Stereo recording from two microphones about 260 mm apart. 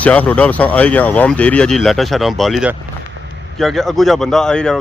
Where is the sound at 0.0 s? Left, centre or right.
Centre.